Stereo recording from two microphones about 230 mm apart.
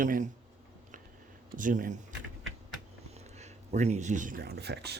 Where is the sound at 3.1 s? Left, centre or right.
Right.